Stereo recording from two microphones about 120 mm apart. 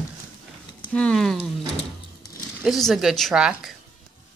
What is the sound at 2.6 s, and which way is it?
A woman's voice, centre (ahead or behind).